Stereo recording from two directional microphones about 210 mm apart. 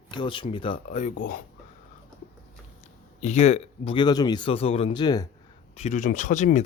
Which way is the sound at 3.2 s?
30° left (ahead or behind).